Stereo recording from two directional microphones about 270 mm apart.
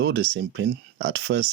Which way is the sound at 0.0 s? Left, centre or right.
Right.